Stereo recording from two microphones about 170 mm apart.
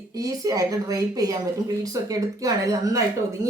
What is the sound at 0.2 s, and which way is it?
Speech, 20° right (ahead or behind).